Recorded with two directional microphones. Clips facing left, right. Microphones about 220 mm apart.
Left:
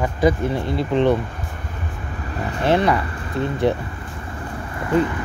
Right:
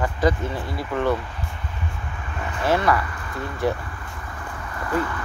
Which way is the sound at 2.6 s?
20° left (ahead or behind).